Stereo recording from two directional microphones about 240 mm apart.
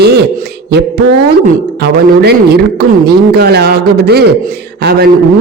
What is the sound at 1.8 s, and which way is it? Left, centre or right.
A man's voice, right.